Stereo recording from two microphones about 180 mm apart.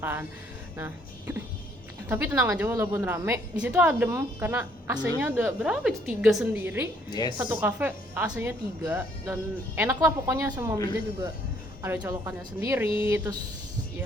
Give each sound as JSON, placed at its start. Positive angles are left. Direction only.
{"t": 0.0, "sound": "speech", "side_deg": -10}
{"t": 2.0, "sound": "speech", "side_deg": -10}
{"t": 7.1, "sound": "a woman's voice", "side_deg": 25}
{"t": 7.3, "sound": "speech", "side_deg": -10}
{"t": 11.8, "sound": "speech", "side_deg": -15}